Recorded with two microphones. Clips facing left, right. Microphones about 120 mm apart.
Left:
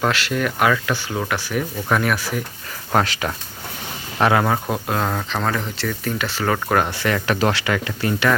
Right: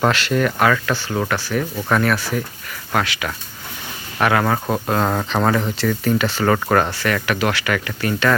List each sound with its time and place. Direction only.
0.0 s speech: 5° left (ahead or behind)
2.9 s speech: 35° left (ahead or behind)
4.2 s speech: 20° left (ahead or behind)
4.7 s speech: centre (ahead or behind)
5.0 s speech: 10° right (ahead or behind)
7.0 s speech: 25° left (ahead or behind)